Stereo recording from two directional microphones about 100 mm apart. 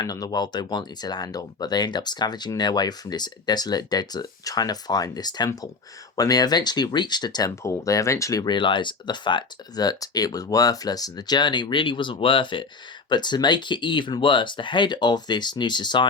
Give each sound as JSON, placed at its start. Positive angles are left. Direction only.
{"t": 0.0, "sound": "speech", "side_deg": 40}
{"t": 7.5, "sound": "speech", "side_deg": 30}
{"t": 8.4, "sound": "speech", "side_deg": 55}